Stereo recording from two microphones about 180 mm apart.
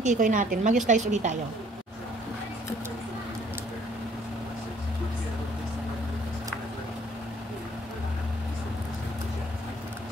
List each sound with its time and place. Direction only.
0.0 s a woman's voice: 45° right (ahead or behind)